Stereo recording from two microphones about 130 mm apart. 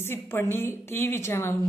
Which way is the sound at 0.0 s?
20° left (ahead or behind).